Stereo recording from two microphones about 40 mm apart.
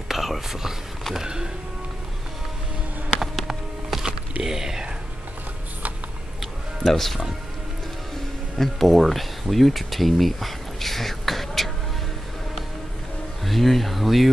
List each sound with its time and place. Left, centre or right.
0.1 s whispering: centre
1.1 s speech: centre
3.9 s music: centre
4.4 s speech: centre
6.8 s speech: centre
8.5 s speech: centre
13.5 s speech: centre